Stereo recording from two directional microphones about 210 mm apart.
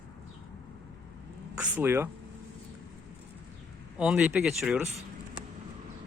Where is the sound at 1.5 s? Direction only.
10° right (ahead or behind).